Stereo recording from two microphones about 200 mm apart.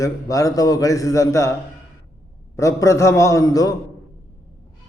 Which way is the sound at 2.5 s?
15° left (ahead or behind).